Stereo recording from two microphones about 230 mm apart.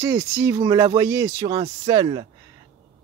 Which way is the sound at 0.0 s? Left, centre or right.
Centre.